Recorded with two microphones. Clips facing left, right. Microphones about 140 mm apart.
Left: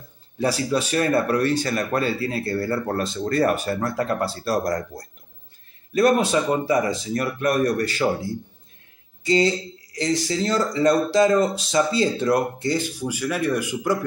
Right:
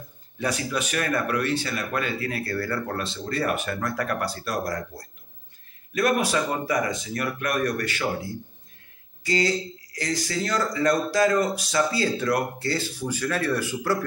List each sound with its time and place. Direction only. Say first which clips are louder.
0.4 s speech: left 5 dB; 30° left (ahead or behind)
3.0 s speech: left 7 dB; 45° left (ahead or behind)
5.9 s speech: left 5 dB; 30° left (ahead or behind)
9.2 s speech: left 4 dB; 25° left (ahead or behind)